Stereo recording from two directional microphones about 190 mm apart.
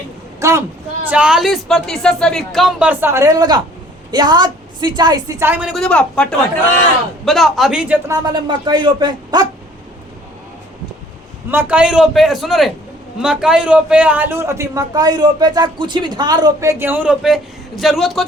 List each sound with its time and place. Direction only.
0.3 s a sound: 15° right (ahead or behind)
1.0 s a woman's voice: 5° right (ahead or behind); by 9.5 s 20° right (ahead or behind)
11.5 s a woman's voice: 5° right (ahead or behind)